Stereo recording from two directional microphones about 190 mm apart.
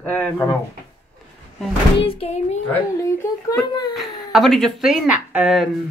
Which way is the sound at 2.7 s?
15° left (ahead or behind).